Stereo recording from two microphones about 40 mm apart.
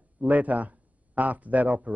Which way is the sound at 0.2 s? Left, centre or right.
Right.